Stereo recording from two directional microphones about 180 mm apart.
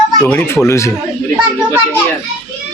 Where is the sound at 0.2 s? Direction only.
10° left (ahead or behind).